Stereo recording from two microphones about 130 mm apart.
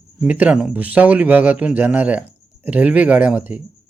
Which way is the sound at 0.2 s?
10° right (ahead or behind).